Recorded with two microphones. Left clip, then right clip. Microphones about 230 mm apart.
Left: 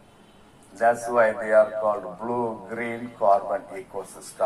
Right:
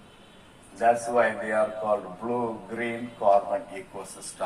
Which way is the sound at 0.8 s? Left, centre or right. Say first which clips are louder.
Left 2 dB; left.